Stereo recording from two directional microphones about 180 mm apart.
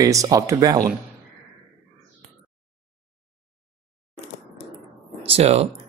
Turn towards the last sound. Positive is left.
turn(degrees=-35)  # may be behind; listen again after turning